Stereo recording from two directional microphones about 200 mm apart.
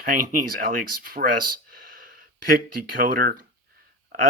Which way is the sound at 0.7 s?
45° right (ahead or behind).